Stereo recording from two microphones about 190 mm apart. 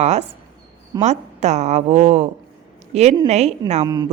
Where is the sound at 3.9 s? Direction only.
20° right (ahead or behind).